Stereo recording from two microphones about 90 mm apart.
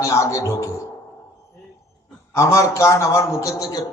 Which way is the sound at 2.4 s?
35° left (ahead or behind).